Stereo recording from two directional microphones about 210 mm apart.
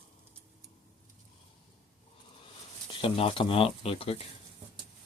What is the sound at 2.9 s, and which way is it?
Speech, 25° left (ahead or behind).